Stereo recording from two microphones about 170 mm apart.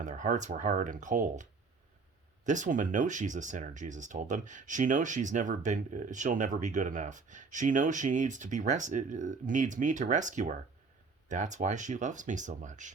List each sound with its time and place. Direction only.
0.0 s speech: 45° right (ahead or behind)